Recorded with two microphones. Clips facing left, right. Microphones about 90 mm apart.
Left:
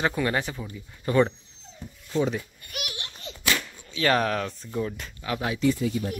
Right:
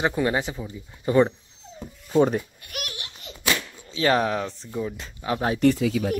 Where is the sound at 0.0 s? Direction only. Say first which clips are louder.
Right 2 dB; 20° right (ahead or behind).